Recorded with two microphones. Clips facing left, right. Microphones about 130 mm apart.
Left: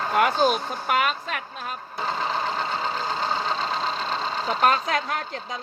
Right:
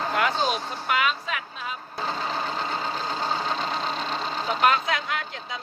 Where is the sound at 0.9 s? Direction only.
50° left (ahead or behind).